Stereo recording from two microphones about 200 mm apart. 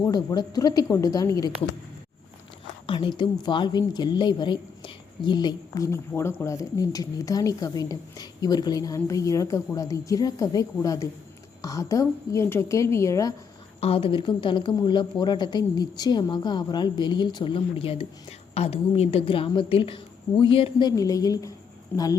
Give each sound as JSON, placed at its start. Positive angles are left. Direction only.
{"t": 0.0, "sound": "speech", "side_deg": 20}
{"t": 2.8, "sound": "a woman's voice", "side_deg": 25}
{"t": 13.8, "sound": "a woman's voice", "side_deg": 25}